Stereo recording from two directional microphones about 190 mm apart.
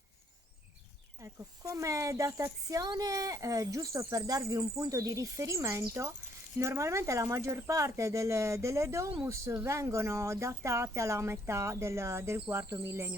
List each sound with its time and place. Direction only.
1.2 s speech: 15° right (ahead or behind)